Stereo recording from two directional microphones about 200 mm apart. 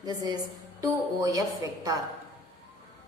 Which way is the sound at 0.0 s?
20° right (ahead or behind).